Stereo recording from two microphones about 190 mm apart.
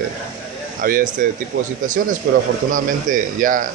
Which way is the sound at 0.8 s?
50° right (ahead or behind).